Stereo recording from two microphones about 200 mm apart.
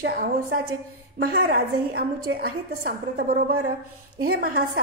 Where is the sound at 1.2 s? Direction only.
50° right (ahead or behind).